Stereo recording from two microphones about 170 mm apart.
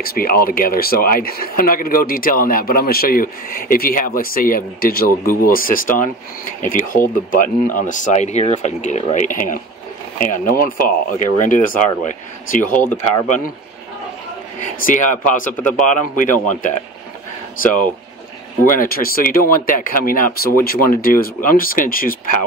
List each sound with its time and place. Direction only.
0.0 s speech: 60° left (ahead or behind)
14.6 s speech: 50° left (ahead or behind)
18.7 s speech: 55° left (ahead or behind)